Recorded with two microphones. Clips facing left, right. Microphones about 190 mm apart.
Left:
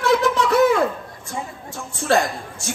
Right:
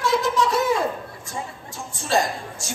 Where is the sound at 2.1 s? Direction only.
60° left (ahead or behind).